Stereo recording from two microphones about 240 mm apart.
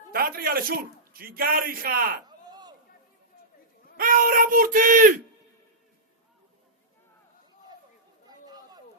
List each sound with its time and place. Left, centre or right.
0.1 s speech: right
2.2 s a sound: centre
3.9 s speech: right
8.3 s chatter: centre